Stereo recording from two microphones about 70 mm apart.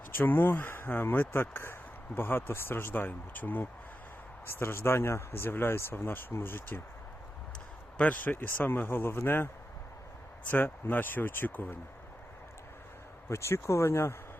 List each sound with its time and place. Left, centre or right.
0.1 s speech: left
7.9 s speech: left
10.5 s speech: left
13.2 s speech: left